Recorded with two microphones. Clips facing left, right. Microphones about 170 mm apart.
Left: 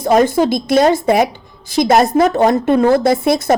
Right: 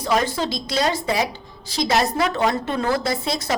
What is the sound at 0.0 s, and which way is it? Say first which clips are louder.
A woman's voice: left 9 dB; 50° left (ahead or behind).